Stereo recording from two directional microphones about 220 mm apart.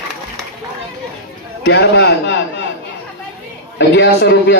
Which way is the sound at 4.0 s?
50° left (ahead or behind).